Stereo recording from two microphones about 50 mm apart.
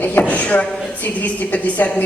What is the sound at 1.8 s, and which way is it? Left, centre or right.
Speech, left.